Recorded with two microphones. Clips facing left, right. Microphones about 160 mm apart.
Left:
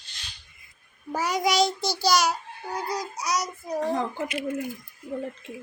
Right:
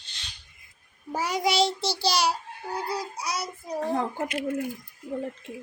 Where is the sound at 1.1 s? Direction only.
30° right (ahead or behind).